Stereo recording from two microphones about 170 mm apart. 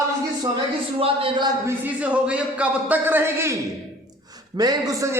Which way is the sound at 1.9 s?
5° right (ahead or behind).